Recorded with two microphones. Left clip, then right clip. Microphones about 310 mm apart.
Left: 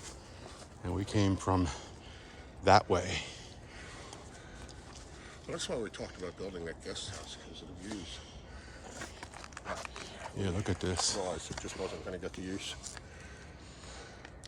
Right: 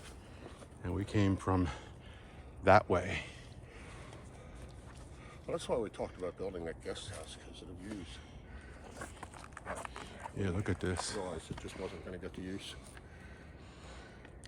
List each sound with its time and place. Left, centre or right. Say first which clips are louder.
0.9 s speech: left 2 dB; centre
5.5 s speech: right 2 dB; centre
9.2 s speech: left 2 dB; centre
11.3 s speech: left 4 dB; centre
11.8 s speech: left 4 dB; centre
12.1 s speech: left 4 dB; left